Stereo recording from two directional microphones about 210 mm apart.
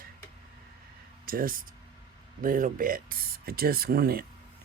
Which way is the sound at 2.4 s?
40° right (ahead or behind).